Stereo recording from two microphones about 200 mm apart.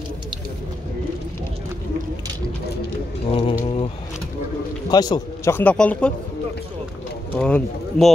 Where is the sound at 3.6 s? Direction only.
30° left (ahead or behind).